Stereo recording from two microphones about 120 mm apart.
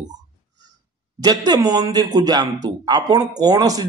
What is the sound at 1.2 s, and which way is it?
A man's voice, 35° right (ahead or behind).